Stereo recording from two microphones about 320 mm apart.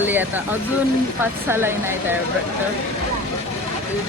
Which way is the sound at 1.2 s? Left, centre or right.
Centre.